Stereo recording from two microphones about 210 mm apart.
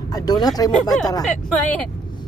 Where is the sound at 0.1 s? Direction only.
20° left (ahead or behind).